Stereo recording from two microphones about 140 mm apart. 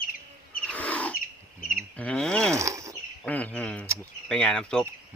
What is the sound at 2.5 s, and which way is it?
Speech, 20° right (ahead or behind).